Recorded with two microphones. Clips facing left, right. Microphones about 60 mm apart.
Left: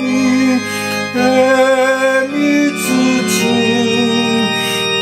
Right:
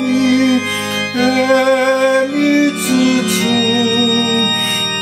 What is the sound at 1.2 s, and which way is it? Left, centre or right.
Music, left.